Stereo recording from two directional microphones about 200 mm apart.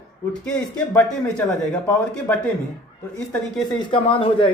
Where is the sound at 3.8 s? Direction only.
25° left (ahead or behind).